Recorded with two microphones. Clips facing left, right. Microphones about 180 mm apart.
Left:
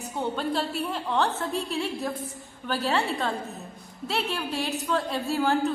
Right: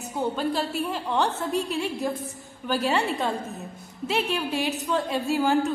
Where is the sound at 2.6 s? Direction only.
Centre (ahead or behind).